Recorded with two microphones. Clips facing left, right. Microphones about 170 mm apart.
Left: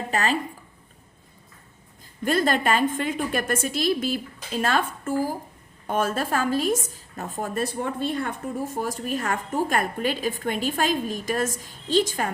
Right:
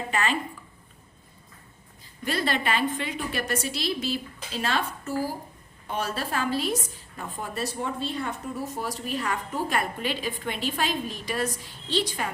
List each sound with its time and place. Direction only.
0.1 s speech: 40° left (ahead or behind)
2.2 s a woman's voice: 45° left (ahead or behind)